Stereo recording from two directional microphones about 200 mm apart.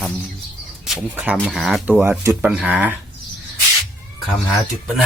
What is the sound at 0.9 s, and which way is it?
Speech, 5° right (ahead or behind).